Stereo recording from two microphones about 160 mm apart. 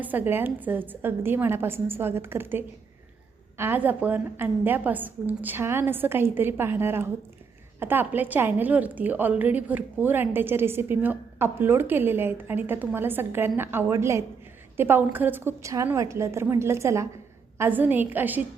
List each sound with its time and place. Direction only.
0.0 s a woman's voice: 10° right (ahead or behind)